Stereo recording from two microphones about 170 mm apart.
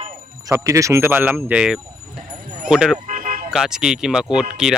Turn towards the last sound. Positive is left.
turn(degrees=-5)  # may be behind; listen again after turning